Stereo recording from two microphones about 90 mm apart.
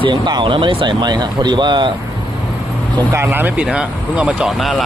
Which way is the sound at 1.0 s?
50° right (ahead or behind).